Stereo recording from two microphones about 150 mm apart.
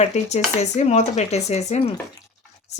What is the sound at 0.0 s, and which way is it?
Speech, 50° left (ahead or behind).